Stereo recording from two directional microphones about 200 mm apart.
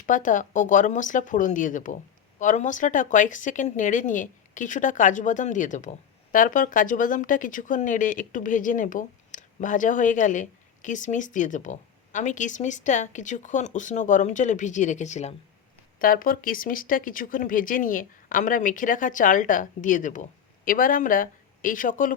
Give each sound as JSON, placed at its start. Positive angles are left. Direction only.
{"t": 0.0, "sound": "speech", "side_deg": 40}
{"t": 16.0, "sound": "speech", "side_deg": 45}